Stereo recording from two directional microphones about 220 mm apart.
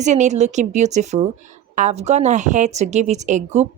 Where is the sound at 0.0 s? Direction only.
30° right (ahead or behind).